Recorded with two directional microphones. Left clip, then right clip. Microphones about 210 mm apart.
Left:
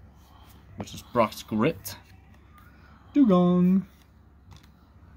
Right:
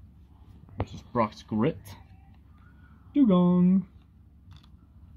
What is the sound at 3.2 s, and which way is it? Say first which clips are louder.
Speech: left 2 dB; 5° left (ahead or behind).